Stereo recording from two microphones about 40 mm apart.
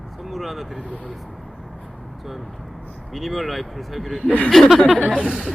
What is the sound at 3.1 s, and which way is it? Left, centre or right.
Speech, centre.